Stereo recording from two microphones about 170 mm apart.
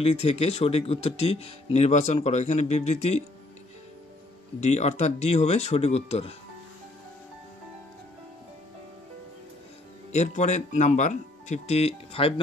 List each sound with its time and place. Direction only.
0.0 s speech: 35° left (ahead or behind)
4.6 s speech: 40° left (ahead or behind)
10.1 s speech: 45° left (ahead or behind)